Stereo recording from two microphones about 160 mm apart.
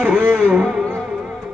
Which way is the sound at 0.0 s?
10° right (ahead or behind).